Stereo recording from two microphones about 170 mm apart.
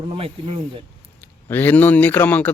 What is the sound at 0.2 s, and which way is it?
Speech, 35° right (ahead or behind).